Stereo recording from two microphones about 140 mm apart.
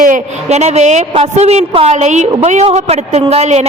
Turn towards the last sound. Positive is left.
turn(degrees=-50)  # may be behind; listen again after turning